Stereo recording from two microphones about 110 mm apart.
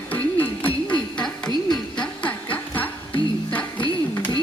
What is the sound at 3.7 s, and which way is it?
Music, 50° left (ahead or behind).